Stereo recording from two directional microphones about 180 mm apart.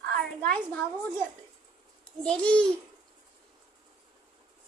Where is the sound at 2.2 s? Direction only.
5° left (ahead or behind).